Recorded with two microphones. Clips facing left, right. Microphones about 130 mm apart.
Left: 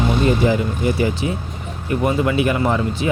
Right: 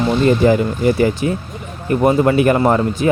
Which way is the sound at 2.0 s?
45° right (ahead or behind).